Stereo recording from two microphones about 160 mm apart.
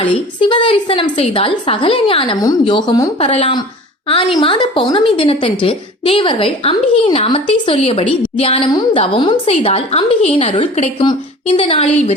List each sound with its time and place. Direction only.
0.0 s a woman's voice: 30° left (ahead or behind)
3.2 s a woman's voice: 40° left (ahead or behind)
8.7 s a woman's voice: 25° left (ahead or behind)